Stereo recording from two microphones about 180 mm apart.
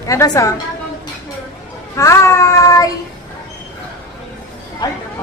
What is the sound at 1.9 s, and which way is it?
Child singing, 15° left (ahead or behind).